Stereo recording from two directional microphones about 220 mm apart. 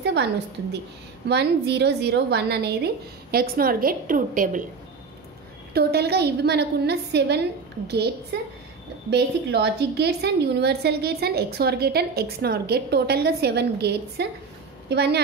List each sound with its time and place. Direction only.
0.0 s a sound: 50° right (ahead or behind)
1.3 s a woman's voice: 50° right (ahead or behind)
5.7 s a woman's voice: 45° right (ahead or behind)